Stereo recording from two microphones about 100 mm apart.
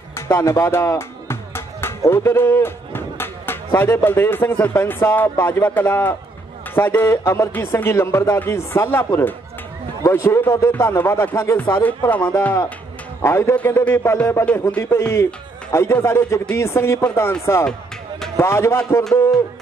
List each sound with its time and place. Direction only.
0.3 s speech: 30° left (ahead or behind)
14.4 s a man's voice: 15° left (ahead or behind)
14.8 s speech: 25° left (ahead or behind)